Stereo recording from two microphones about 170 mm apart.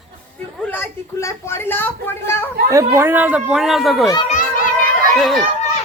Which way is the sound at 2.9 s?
10° right (ahead or behind).